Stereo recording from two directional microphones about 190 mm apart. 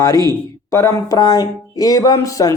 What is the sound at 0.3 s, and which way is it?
Speech, 15° left (ahead or behind).